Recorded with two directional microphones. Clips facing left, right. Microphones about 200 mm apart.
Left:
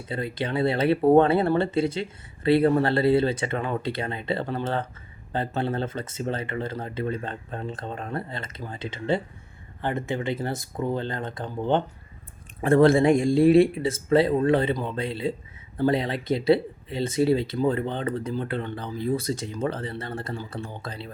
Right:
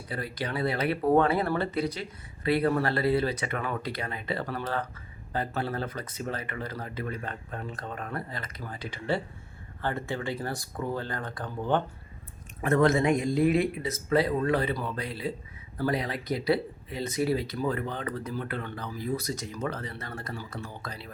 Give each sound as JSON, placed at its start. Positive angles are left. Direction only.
{"t": 0.1, "sound": "speech", "side_deg": 25}